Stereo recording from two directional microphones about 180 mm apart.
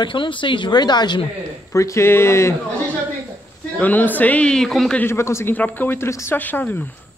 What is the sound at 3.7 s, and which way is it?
Speech, 10° left (ahead or behind).